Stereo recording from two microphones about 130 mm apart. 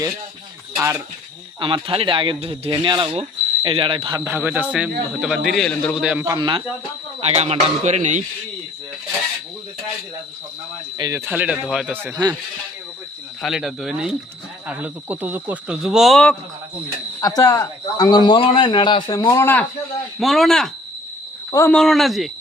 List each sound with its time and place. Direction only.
0.8 s speech: 20° right (ahead or behind)
1.5 s speech: 40° right (ahead or behind)
4.2 s speech: 15° right (ahead or behind)
6.2 s speech: 30° right (ahead or behind)
7.2 s speech: 50° right (ahead or behind)
11.1 s speech: 10° right (ahead or behind)
13.4 s speech: centre (ahead or behind)
14.7 s speech: 10° right (ahead or behind)
17.2 s speech: 30° left (ahead or behind)
20.1 s speech: centre (ahead or behind)
21.7 s speech: 5° left (ahead or behind)